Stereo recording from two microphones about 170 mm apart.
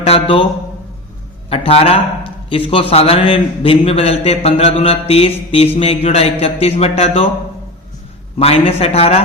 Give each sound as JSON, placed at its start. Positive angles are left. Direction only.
{"t": 0.0, "sound": "a man's voice", "side_deg": 35}
{"t": 1.5, "sound": "a man's voice", "side_deg": 35}
{"t": 8.4, "sound": "a man's voice", "side_deg": 35}